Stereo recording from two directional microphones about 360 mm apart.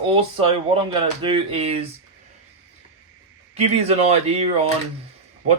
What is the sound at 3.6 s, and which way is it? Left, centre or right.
Speech, centre.